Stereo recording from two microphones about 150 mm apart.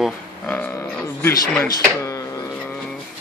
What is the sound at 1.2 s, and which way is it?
Speech, 10° left (ahead or behind).